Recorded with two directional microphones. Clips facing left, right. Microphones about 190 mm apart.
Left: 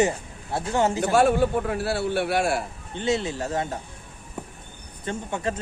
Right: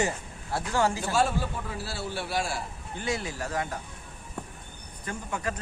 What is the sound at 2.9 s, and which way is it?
Speech, 25° left (ahead or behind).